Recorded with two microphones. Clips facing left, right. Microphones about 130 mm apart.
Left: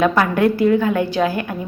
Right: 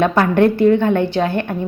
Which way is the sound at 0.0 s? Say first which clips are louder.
Right 2 dB; 30° right (ahead or behind).